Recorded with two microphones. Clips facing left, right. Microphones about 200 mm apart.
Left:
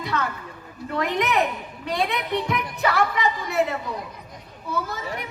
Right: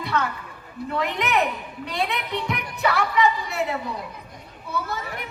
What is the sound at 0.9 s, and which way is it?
Speech, 60° right (ahead or behind).